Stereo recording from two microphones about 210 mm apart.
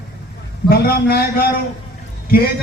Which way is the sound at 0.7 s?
45° left (ahead or behind).